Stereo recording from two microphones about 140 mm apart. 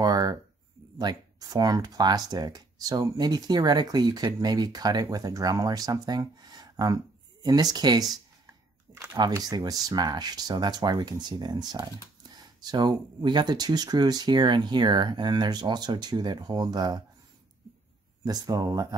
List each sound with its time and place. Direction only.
0.0 s a sound: 25° right (ahead or behind)
0.9 s speech: 30° right (ahead or behind)
9.1 s speech: 30° right (ahead or behind)
18.2 s speech: 25° right (ahead or behind)